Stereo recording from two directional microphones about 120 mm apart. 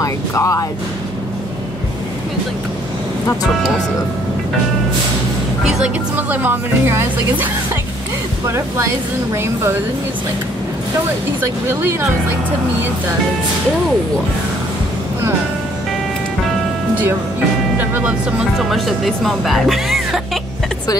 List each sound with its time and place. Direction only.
0.0 s speech: 25° left (ahead or behind)
5.7 s speech: 10° right (ahead or behind)
17.7 s speech: 15° right (ahead or behind)
18.6 s speech: centre (ahead or behind)